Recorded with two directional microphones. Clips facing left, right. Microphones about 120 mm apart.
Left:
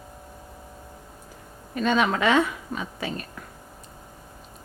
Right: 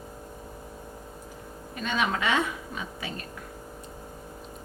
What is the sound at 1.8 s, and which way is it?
Speech, 45° left (ahead or behind).